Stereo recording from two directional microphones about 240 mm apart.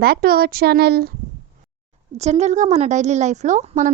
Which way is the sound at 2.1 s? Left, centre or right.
Right.